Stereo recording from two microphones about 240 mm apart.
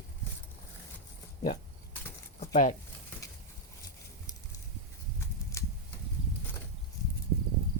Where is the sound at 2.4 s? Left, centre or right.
Left.